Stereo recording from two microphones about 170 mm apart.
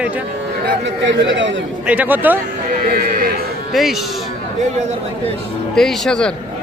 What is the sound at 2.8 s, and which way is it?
Speech, 55° right (ahead or behind).